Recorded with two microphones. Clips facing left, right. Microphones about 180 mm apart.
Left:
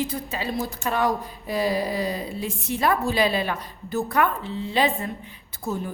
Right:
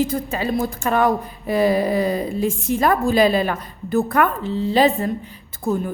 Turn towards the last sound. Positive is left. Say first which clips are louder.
# right 7 dB
turn(degrees=-55)  # may be behind; listen again after turning